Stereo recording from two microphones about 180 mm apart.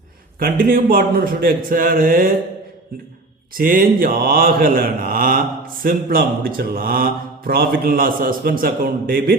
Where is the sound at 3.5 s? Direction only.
50° right (ahead or behind).